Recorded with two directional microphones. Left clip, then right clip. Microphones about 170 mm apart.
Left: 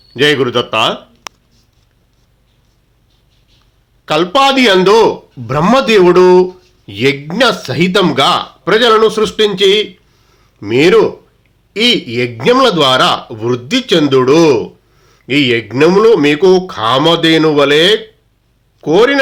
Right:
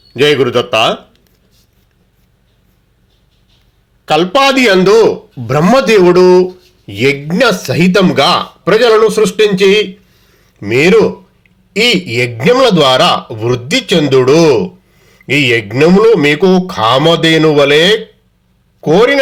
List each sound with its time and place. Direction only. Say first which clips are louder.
0.1 s a man's voice: right 2 dB; 10° right (ahead or behind)
4.0 s a man's voice: right 1 dB; 10° right (ahead or behind)